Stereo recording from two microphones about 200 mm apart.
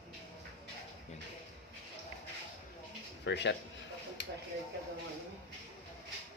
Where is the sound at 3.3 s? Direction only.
60° left (ahead or behind).